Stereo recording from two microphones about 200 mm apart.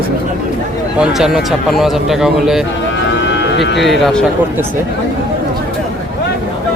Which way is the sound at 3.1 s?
65° left (ahead or behind).